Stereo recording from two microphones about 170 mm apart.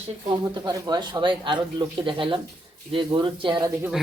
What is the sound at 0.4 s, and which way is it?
Speech, 25° right (ahead or behind).